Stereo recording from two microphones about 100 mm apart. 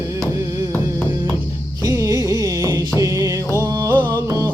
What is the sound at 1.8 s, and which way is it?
Music, 35° right (ahead or behind).